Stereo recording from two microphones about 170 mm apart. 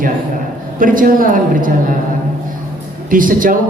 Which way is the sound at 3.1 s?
55° right (ahead or behind).